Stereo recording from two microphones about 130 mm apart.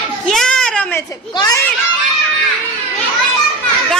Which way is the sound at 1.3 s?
30° left (ahead or behind).